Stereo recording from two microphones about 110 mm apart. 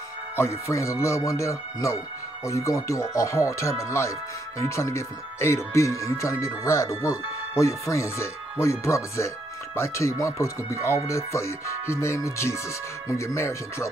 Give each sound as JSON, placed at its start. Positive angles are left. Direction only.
{"t": 0.4, "sound": "speech", "side_deg": 25}